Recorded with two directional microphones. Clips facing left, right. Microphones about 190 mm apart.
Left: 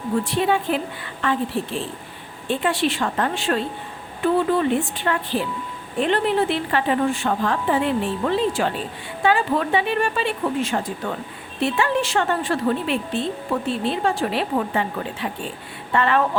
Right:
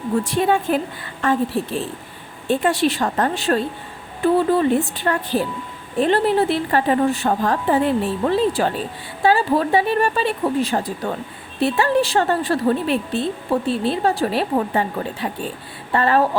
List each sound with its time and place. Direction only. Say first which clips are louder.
0.3 s a woman's voice: right 3 dB; 45° right (ahead or behind)